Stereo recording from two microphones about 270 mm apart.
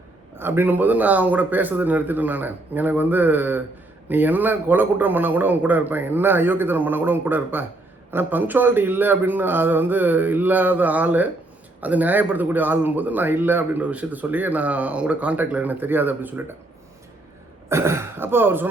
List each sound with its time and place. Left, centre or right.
0.3 s speech: centre
17.7 s speech: centre